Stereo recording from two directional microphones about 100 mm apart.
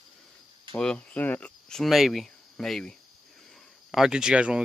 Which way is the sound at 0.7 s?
10° left (ahead or behind).